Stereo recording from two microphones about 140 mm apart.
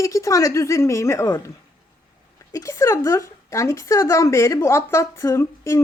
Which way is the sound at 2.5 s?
25° left (ahead or behind).